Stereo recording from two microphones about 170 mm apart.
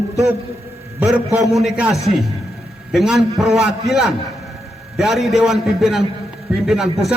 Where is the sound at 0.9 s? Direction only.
10° right (ahead or behind).